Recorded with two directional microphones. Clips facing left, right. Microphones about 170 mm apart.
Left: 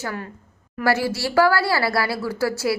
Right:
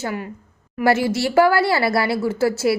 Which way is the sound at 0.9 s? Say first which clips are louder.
Right 3 dB; 20° right (ahead or behind).